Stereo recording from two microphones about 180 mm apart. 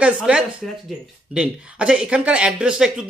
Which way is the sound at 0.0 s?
5° right (ahead or behind).